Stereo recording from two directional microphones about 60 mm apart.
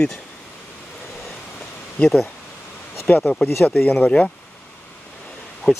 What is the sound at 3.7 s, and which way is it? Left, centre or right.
Speech, left.